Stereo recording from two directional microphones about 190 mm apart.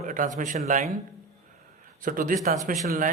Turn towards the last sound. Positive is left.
turn(degrees=-45)  # may be behind; listen again after turning